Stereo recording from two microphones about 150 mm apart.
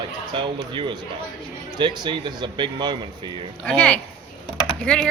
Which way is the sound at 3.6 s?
5° left (ahead or behind).